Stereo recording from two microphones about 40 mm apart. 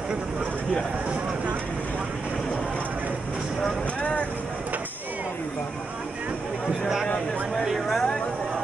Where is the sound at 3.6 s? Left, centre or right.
Centre.